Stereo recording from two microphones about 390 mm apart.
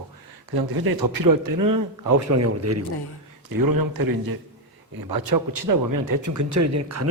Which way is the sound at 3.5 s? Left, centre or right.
Right.